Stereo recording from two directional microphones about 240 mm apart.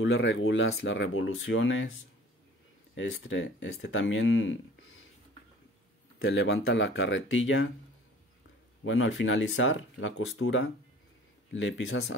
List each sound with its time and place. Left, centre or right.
0.0 s speech: left
2.9 s speech: left
6.1 s speech: left
8.8 s speech: left